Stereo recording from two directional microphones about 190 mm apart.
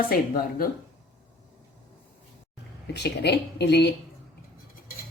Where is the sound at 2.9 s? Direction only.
60° left (ahead or behind).